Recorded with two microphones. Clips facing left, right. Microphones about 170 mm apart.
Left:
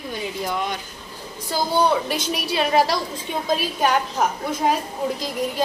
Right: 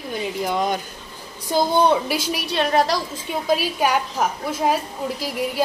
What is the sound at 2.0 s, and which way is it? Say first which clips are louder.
Speech: even; 5° right (ahead or behind).